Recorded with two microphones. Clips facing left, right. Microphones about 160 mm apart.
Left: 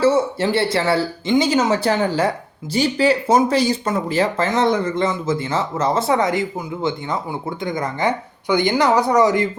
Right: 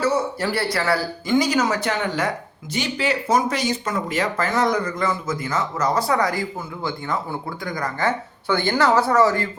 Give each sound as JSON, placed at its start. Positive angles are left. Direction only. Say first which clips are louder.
{"t": 0.0, "sound": "speech", "louder": "left 5 dB", "side_deg": 25}
{"t": 7.6, "sound": "speech", "louder": "left 3 dB", "side_deg": 20}